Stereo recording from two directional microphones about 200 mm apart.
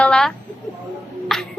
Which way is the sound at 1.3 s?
Centre (ahead or behind).